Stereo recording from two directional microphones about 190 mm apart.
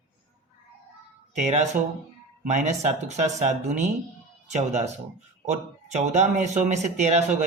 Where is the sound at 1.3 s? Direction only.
35° right (ahead or behind).